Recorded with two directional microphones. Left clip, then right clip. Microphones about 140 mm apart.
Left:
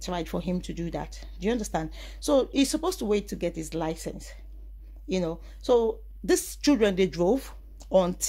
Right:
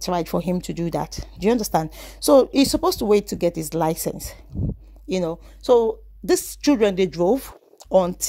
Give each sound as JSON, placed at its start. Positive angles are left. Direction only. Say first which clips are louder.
{"t": 0.0, "sound": "speech", "louder": "right 8 dB", "side_deg": -50}
{"t": 7.3, "sound": "a sound", "louder": "right 4 dB", "side_deg": -60}
{"t": 8.0, "sound": "speech", "louder": "right 4 dB", "side_deg": -40}